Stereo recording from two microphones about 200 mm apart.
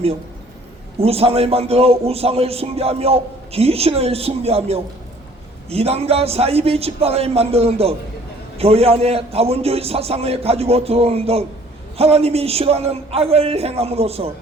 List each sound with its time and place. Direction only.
0.9 s a man's voice: 30° right (ahead or behind)